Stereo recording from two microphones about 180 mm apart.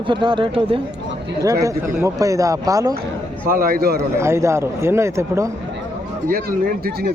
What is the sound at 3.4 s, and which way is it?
Speech, 50° right (ahead or behind).